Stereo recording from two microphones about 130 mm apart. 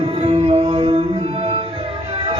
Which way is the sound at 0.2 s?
50° right (ahead or behind).